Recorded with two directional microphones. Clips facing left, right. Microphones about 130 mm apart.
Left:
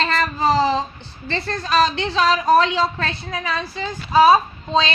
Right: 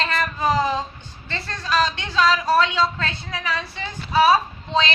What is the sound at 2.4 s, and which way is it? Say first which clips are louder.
Speech: left 3 dB; 40° left (ahead or behind).